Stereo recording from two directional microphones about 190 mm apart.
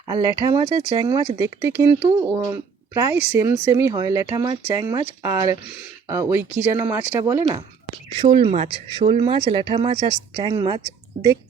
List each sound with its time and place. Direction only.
0.1 s speech: 15° right (ahead or behind)
8.2 s speech: 30° right (ahead or behind)